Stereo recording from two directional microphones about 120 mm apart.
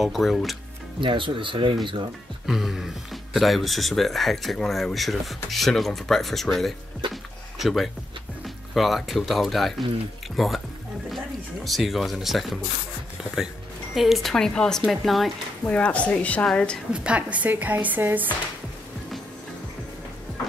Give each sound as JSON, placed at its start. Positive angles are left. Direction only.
{"t": 0.0, "sound": "speech", "side_deg": 0}
{"t": 1.0, "sound": "speech", "side_deg": -45}
{"t": 2.4, "sound": "speech", "side_deg": -5}
{"t": 11.1, "sound": "music", "side_deg": 0}
{"t": 13.2, "sound": "speech", "side_deg": 0}
{"t": 15.6, "sound": "a woman's voice", "side_deg": 10}
{"t": 16.9, "sound": "speech", "side_deg": -10}